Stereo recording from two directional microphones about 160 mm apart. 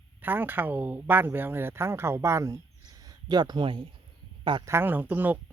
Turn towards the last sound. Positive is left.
turn(degrees=-10)  # may be behind; listen again after turning